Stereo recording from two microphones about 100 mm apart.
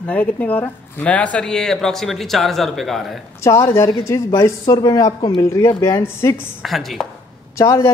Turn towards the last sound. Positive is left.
turn(degrees=30)  # may be behind; listen again after turning